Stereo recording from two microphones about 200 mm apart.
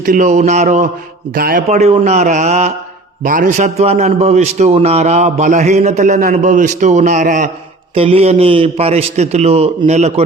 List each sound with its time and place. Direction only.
0.0 s a man's voice: 40° right (ahead or behind)